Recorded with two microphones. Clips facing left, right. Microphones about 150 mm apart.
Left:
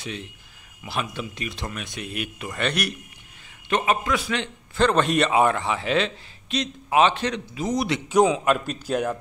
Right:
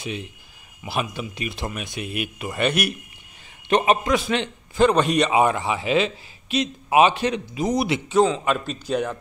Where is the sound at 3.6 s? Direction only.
20° right (ahead or behind).